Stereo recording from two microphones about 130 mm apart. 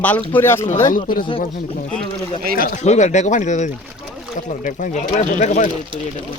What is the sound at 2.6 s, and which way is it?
Speech, 75° left (ahead or behind).